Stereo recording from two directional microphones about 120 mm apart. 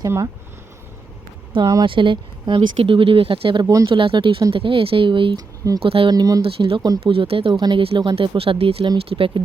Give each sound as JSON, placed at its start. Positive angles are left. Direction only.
{"t": 0.0, "sound": "speech", "side_deg": -30}
{"t": 1.6, "sound": "speech", "side_deg": -30}
{"t": 1.9, "sound": "speech", "side_deg": -45}
{"t": 5.4, "sound": "speech", "side_deg": -30}
{"t": 5.8, "sound": "speech", "side_deg": -50}
{"t": 6.1, "sound": "speech", "side_deg": -30}
{"t": 6.4, "sound": "speech", "side_deg": -50}